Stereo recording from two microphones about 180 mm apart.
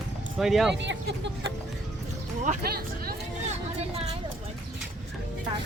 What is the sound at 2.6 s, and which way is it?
Music, 60° right (ahead or behind).